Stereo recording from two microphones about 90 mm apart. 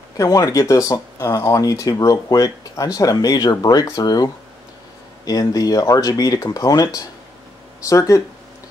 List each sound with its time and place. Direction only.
0.2 s speech: 40° left (ahead or behind)